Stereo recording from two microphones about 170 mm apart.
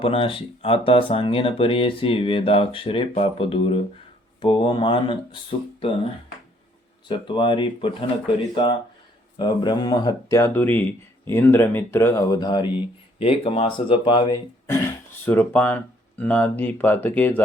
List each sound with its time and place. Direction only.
0.0 s speech: 35° left (ahead or behind)
7.1 s speech: 30° left (ahead or behind)
9.4 s speech: 25° left (ahead or behind)
15.2 s speech: 10° left (ahead or behind)